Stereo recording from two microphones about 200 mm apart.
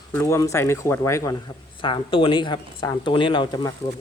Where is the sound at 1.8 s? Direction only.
25° left (ahead or behind).